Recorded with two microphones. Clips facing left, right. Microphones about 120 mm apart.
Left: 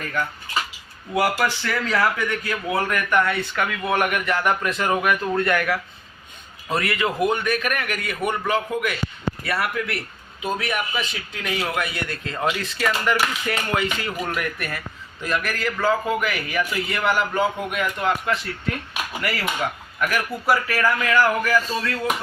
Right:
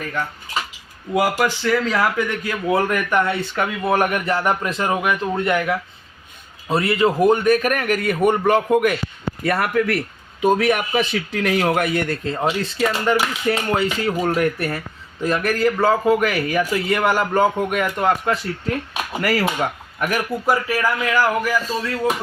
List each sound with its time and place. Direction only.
1.1 s a man's voice: 15° right (ahead or behind); by 10.0 s 45° right (ahead or behind)
10.4 s speech: 55° right (ahead or behind)
12.2 s a man's voice: 30° right (ahead or behind)
20.0 s a man's voice: 25° right (ahead or behind)